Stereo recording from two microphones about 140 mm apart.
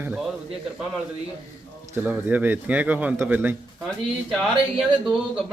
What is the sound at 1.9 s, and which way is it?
A man's voice, 15° right (ahead or behind).